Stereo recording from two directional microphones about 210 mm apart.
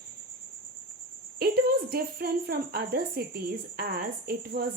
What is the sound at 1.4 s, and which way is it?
A woman's voice, 45° right (ahead or behind).